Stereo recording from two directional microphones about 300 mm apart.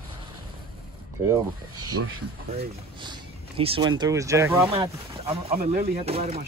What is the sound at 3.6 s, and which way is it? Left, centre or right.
Speech, centre.